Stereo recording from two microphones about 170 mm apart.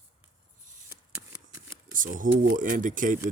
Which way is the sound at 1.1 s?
10° right (ahead or behind).